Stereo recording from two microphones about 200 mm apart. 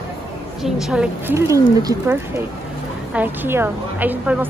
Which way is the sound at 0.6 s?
5° right (ahead or behind).